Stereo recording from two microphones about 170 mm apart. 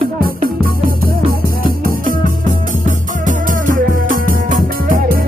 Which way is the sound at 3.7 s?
50° right (ahead or behind).